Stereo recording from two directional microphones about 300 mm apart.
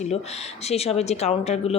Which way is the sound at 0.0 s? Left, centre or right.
Left.